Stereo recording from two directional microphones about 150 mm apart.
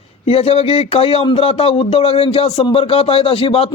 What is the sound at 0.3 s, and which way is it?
A man's voice, 40° left (ahead or behind).